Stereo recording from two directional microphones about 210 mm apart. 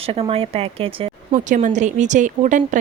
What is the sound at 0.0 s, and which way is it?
Speech, 25° right (ahead or behind).